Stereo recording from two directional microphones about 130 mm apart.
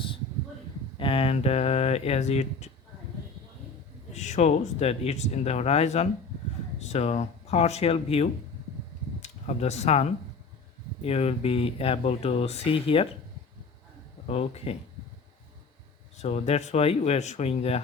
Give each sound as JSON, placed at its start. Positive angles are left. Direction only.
{"t": 0.9, "sound": "speech", "side_deg": 45}
{"t": 4.1, "sound": "speech", "side_deg": 60}
{"t": 14.3, "sound": "speech", "side_deg": 55}
{"t": 16.1, "sound": "speech", "side_deg": 60}